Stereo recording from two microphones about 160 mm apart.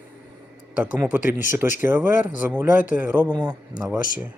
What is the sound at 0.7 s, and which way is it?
Speech, 10° right (ahead or behind).